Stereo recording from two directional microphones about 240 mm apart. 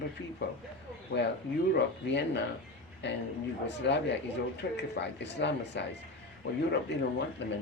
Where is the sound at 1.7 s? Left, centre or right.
Left.